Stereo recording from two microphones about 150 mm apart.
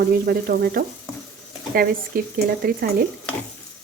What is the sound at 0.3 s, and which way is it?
Frying, 85° right.